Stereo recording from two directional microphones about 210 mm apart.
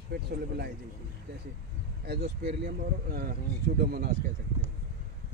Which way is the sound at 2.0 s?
50° right (ahead or behind).